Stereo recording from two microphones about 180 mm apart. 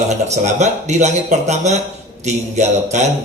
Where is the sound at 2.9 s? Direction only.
40° right (ahead or behind).